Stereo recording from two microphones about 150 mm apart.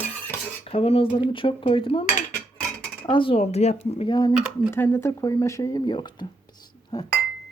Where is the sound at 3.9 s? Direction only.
30° left (ahead or behind).